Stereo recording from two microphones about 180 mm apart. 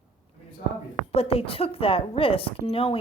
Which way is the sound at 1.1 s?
35° left (ahead or behind).